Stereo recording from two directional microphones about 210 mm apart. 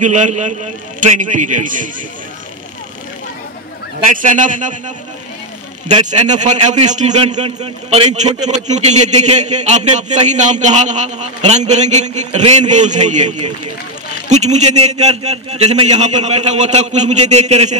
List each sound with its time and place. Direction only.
0.0 s a man's voice: 35° right (ahead or behind)
4.1 s a man's voice: 40° right (ahead or behind)
6.0 s a man's voice: 35° right (ahead or behind)
14.3 s a man's voice: 35° right (ahead or behind)